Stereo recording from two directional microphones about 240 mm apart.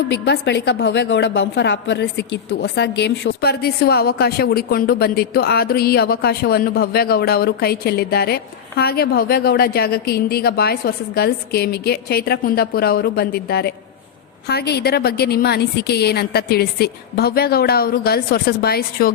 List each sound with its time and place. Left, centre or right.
0.1 s a woman's voice: left